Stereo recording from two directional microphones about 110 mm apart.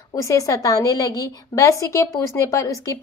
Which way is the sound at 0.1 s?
30° left (ahead or behind).